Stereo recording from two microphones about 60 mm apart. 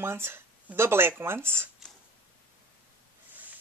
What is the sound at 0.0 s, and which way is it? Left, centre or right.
Speech, right.